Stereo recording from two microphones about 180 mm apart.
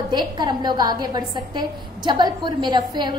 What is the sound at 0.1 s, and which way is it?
A woman's voice, 25° right (ahead or behind).